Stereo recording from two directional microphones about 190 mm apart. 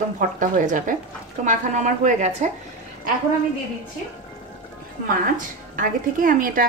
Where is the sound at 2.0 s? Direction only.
40° right (ahead or behind).